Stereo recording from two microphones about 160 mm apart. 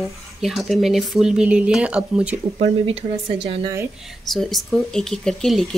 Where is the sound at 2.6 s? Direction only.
40° right (ahead or behind).